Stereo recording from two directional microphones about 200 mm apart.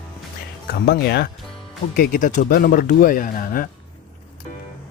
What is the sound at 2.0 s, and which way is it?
Speech, 40° left (ahead or behind).